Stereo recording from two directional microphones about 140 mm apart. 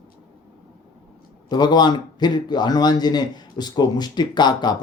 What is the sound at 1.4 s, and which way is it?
A man's voice, 30° left (ahead or behind).